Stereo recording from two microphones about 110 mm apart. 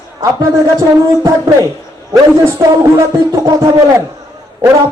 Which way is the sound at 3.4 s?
35° right (ahead or behind).